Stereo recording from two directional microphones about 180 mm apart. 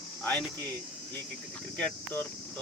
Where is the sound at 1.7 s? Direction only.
5° left (ahead or behind).